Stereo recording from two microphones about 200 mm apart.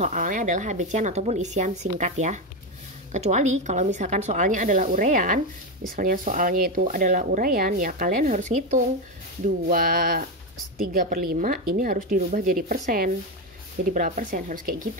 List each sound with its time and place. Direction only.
0.0 s a woman's voice: 40° right (ahead or behind)